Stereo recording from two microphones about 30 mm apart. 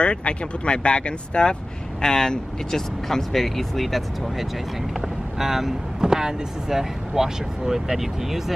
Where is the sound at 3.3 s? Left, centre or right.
Centre.